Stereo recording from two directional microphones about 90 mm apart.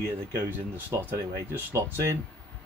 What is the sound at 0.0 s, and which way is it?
Speech, 30° right (ahead or behind).